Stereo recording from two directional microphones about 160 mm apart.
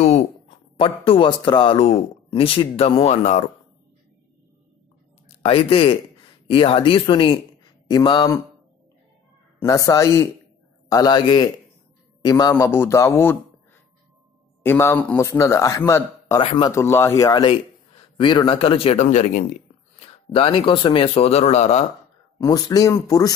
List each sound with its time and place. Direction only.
0.7 s speech: 35° left (ahead or behind)
5.4 s a man's voice: 35° left (ahead or behind)
9.6 s a man's voice: 20° left (ahead or behind)
14.6 s a man's voice: 15° left (ahead or behind)
16.3 s speech: 30° left (ahead or behind)
16.7 s speech: 15° left (ahead or behind); by 19.4 s 50° left (ahead or behind)
20.3 s speech: 35° left (ahead or behind)
22.4 s speech: 25° left (ahead or behind)